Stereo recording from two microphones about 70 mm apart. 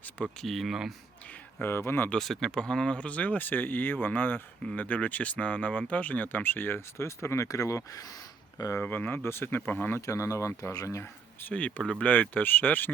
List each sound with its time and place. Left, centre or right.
0.4 s speech: centre
1.6 s speech: left
2.1 s speech: centre; by 8.8 s left
8.8 s speech: left
10.1 s speech: left
11.4 s speech: centre